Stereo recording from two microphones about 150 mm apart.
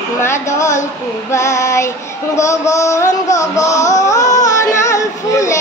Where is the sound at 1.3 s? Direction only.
20° left (ahead or behind).